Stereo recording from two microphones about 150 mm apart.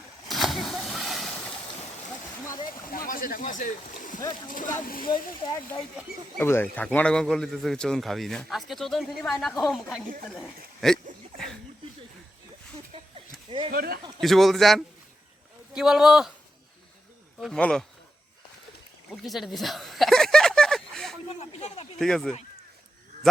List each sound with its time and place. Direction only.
0.3 s vehicle: centre (ahead or behind)
3.1 s speech: 70° left (ahead or behind)
4.9 s speech: 70° left (ahead or behind)
6.4 s a man's voice: 15° left (ahead or behind)
10.8 s a sound: 5° left (ahead or behind)
13.7 s a man's voice: 90° right
14.2 s a man's voice: centre (ahead or behind)
17.4 s a man's voice: 5° left (ahead or behind)
19.1 s a sound: centre (ahead or behind)
21.9 s a man's voice: centre (ahead or behind)